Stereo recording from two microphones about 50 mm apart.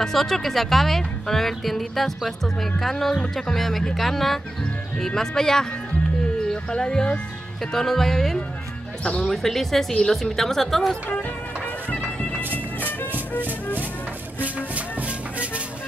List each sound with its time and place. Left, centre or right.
0.0 s a woman's voice: centre
11.1 s music: left
14.4 s music: right